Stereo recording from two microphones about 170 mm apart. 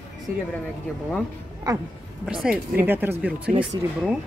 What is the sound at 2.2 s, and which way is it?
Speech, 5° right (ahead or behind).